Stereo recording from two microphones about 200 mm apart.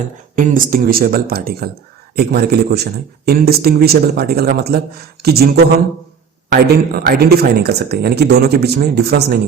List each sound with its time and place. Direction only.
0.3 s a man's voice: 40° right (ahead or behind)